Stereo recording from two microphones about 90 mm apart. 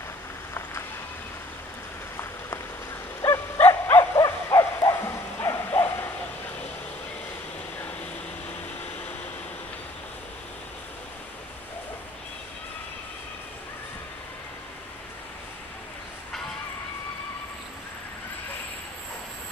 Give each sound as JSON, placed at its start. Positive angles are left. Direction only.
{"t": 3.2, "sound": "dog", "side_deg": 25}
{"t": 4.2, "sound": "bow-wow", "side_deg": 35}